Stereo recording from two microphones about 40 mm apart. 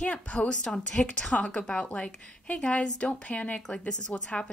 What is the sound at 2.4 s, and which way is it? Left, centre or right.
Speech, left.